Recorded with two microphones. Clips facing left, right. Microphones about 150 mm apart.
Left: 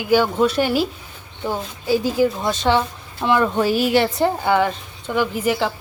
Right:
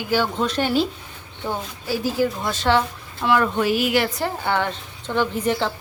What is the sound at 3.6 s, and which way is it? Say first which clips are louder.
Speech: left 3 dB; 35° left (ahead or behind).